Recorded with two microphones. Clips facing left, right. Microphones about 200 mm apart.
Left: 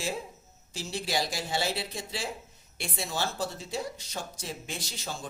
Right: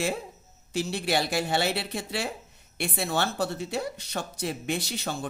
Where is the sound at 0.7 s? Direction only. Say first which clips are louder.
Right 5 dB; 60° right (ahead or behind).